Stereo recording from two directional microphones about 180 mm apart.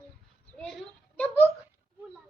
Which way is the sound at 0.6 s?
5° left (ahead or behind).